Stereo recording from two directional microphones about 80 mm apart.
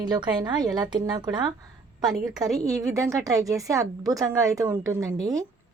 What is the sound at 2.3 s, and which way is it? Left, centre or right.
A woman's voice, right.